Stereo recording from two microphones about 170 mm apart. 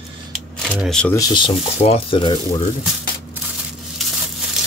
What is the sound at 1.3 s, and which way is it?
Speech, 35° left (ahead or behind).